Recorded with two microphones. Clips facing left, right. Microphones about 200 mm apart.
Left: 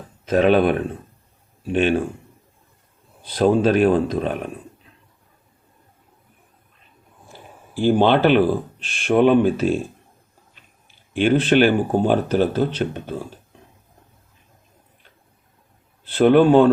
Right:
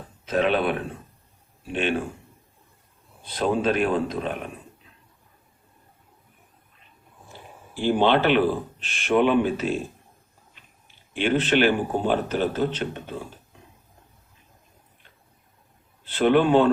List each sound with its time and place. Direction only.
0.3 s speech: 45° left (ahead or behind)
3.3 s speech: 40° left (ahead or behind)
7.8 s speech: 40° left (ahead or behind)
11.1 s speech: 45° left (ahead or behind)
16.1 s speech: 40° left (ahead or behind)